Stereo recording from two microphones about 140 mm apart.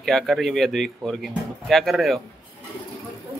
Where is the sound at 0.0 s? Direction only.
Centre (ahead or behind).